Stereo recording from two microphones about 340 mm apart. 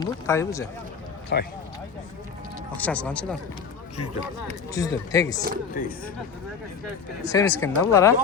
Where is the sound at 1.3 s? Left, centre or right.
Left.